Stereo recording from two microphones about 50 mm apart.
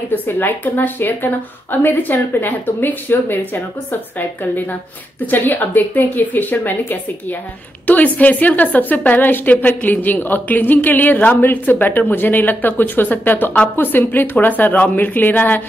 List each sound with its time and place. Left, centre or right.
0.1 s a woman's voice: left
7.8 s a woman's voice: left